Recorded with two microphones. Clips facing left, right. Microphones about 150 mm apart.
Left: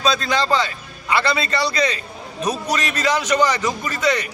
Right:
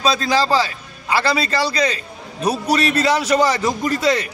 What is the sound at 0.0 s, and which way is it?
A man's voice, 30° right (ahead or behind).